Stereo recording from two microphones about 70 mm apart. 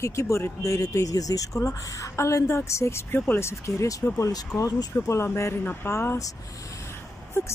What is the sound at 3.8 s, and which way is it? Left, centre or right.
A woman's voice, left.